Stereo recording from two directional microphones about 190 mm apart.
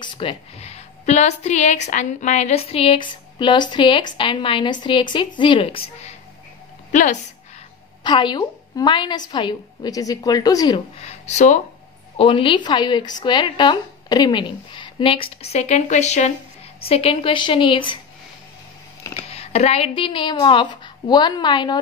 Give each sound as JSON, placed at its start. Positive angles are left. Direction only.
{"t": 0.0, "sound": "a woman's voice", "side_deg": 25}
{"t": 6.9, "sound": "a woman's voice", "side_deg": 40}
{"t": 8.0, "sound": "speech", "side_deg": 25}
{"t": 11.0, "sound": "speech", "side_deg": 35}
{"t": 12.2, "sound": "speech", "side_deg": 25}
{"t": 19.2, "sound": "a woman's voice", "side_deg": 35}